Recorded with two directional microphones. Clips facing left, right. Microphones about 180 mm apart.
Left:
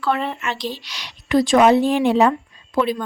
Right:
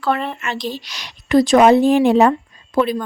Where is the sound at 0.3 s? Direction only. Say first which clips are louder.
Right 2 dB; 50° right (ahead or behind).